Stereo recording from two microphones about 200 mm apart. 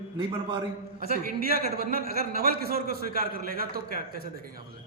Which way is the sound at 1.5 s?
50° left (ahead or behind).